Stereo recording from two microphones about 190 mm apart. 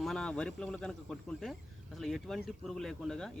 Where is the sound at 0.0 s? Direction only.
5° left (ahead or behind).